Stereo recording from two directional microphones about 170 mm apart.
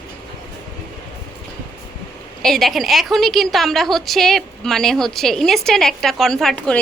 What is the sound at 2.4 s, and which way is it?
A woman's voice, centre (ahead or behind).